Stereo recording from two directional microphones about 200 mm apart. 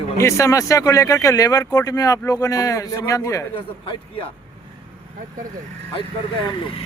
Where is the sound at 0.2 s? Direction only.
15° left (ahead or behind).